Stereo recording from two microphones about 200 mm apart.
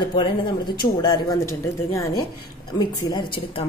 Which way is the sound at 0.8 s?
20° left (ahead or behind).